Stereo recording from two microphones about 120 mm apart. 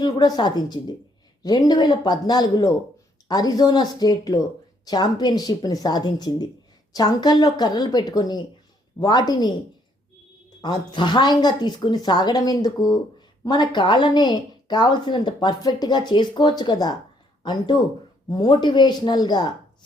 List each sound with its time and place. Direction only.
0.0 s a woman's voice: 35° left (ahead or behind)
10.6 s a woman's voice: 40° left (ahead or behind)